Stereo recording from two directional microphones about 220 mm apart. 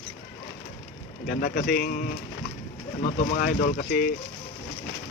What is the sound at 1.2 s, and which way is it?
Speech, 40° left (ahead or behind).